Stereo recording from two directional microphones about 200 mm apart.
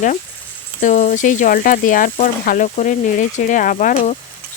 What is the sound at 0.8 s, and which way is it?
Speech, 45° left (ahead or behind).